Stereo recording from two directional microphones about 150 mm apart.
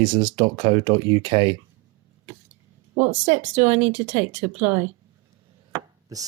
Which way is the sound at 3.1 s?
55° right (ahead or behind).